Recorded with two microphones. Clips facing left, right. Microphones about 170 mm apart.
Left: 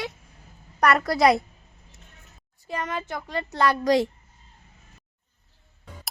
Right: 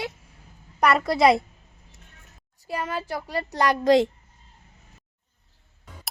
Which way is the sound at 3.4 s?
35° right (ahead or behind).